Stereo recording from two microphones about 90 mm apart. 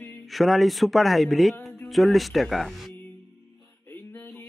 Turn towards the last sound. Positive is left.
turn(degrees=20)  # may be behind; listen again after turning